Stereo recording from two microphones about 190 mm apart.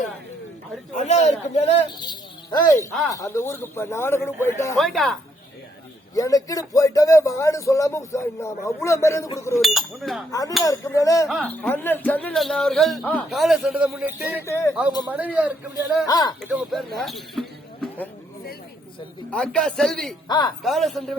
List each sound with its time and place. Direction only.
0.9 s a man's voice: 35° left (ahead or behind)
2.0 s speech: 25° left (ahead or behind)
4.8 s a man's voice: centre (ahead or behind)
6.1 s speech: 20° left (ahead or behind)
9.6 s a man's voice: centre (ahead or behind)
10.6 s speech: 20° left (ahead or behind)
11.3 s a man's voice: 5° left (ahead or behind)
14.4 s speech: 15° left (ahead or behind)
15.1 s a man's voice: 10° right (ahead or behind)
16.0 s speech: 20° left (ahead or behind)
16.4 s speech: centre (ahead or behind)
19.3 s a man's voice: 5° left (ahead or behind)
20.2 s speech: 25° left (ahead or behind)
20.6 s a man's voice: centre (ahead or behind)